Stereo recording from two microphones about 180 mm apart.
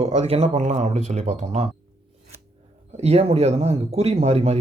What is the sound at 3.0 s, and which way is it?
Speech, 35° right (ahead or behind).